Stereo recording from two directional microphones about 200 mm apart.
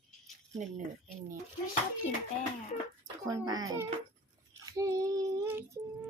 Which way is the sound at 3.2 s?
20° right (ahead or behind).